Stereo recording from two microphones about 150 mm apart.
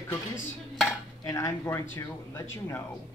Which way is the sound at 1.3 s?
20° left (ahead or behind).